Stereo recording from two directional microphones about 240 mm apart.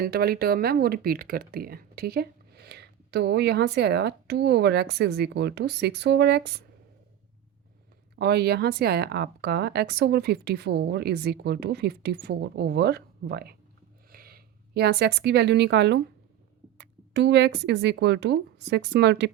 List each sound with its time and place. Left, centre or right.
0.0 s speech: right
8.1 s a woman's voice: right